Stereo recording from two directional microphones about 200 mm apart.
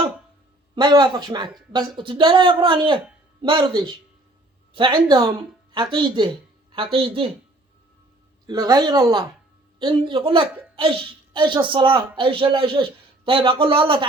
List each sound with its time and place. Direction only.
0.8 s speech: 20° right (ahead or behind)
8.4 s speech: 20° right (ahead or behind)